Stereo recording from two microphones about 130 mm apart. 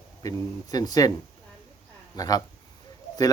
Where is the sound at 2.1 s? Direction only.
30° left (ahead or behind).